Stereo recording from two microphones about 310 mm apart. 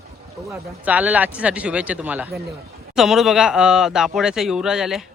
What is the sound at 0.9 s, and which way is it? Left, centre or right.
Speech, centre.